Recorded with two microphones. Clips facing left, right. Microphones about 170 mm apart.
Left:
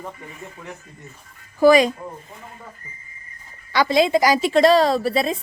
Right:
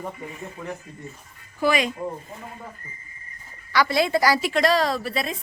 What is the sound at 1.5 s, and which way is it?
Speech, 40° left (ahead or behind).